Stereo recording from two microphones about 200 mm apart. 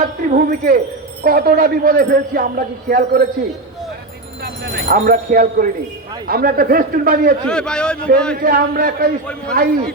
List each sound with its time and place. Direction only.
0.3 s speech: 45° right (ahead or behind)
4.4 s speech: 50° right (ahead or behind)
7.4 s a man's voice: 5° left (ahead or behind)
8.4 s speech: 45° right (ahead or behind)